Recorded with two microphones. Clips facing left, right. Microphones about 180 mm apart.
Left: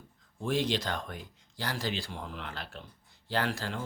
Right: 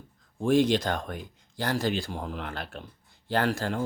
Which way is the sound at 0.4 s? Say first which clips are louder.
Right 8 dB; 50° right (ahead or behind).